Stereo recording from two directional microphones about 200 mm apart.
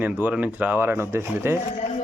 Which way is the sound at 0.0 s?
10° right (ahead or behind).